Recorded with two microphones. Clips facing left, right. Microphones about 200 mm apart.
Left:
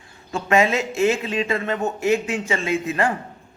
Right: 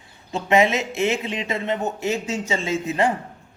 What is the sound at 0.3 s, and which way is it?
A man's voice, 20° right (ahead or behind).